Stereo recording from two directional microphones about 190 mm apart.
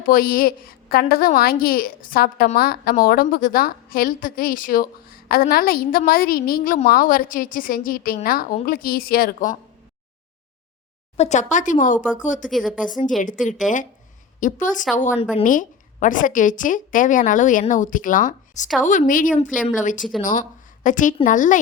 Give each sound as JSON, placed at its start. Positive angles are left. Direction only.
{"t": 0.0, "sound": "a woman's voice", "side_deg": 50}
{"t": 11.2, "sound": "speech", "side_deg": 40}
{"t": 12.5, "sound": "a woman's voice", "side_deg": 0}
{"t": 13.0, "sound": "a woman's voice", "side_deg": 45}
{"t": 20.0, "sound": "a woman's voice", "side_deg": 0}
{"t": 20.8, "sound": "a woman's voice", "side_deg": 45}